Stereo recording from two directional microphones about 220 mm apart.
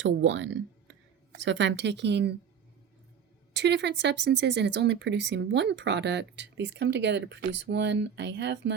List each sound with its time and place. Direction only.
0.0 s speech: 55° right (ahead or behind)
3.5 s speech: 50° right (ahead or behind)